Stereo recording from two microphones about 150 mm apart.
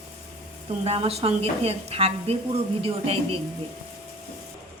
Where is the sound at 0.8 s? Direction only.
40° right (ahead or behind).